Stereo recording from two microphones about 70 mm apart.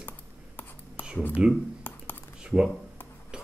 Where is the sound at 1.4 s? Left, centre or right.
Centre.